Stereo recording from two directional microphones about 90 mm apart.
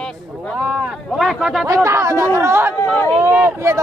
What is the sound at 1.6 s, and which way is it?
Speech, 35° right (ahead or behind).